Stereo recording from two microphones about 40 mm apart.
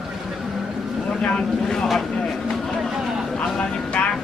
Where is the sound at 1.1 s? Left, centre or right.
Left.